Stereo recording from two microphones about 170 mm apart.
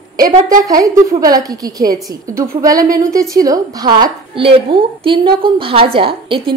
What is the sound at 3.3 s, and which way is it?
A woman's voice, 20° right (ahead or behind).